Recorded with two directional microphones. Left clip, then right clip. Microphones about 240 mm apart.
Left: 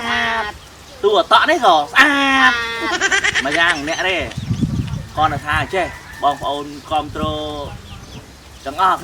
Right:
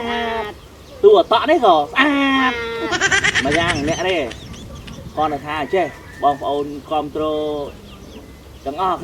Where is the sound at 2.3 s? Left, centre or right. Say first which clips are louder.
Left 4 dB; left.